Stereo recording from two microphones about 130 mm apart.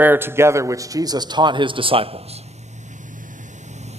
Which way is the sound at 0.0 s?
15° right (ahead or behind).